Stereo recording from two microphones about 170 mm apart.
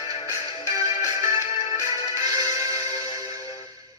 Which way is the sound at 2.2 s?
20° right (ahead or behind).